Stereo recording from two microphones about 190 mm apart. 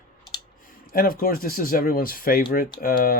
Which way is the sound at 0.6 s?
45° left (ahead or behind).